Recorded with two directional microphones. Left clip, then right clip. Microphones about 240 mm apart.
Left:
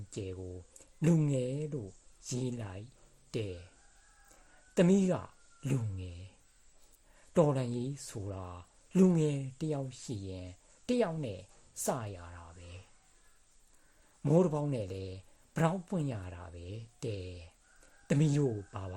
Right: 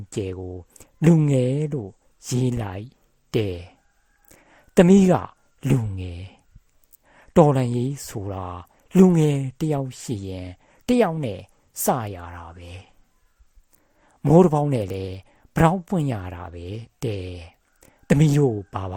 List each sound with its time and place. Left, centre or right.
0.1 s speech: right
14.2 s speech: right